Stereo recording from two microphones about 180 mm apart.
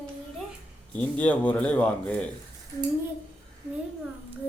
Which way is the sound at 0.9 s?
5° left (ahead or behind).